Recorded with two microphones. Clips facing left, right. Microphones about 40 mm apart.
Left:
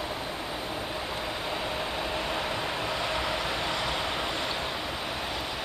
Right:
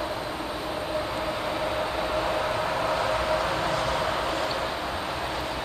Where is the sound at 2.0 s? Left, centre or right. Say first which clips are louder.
Right 4 dB; right.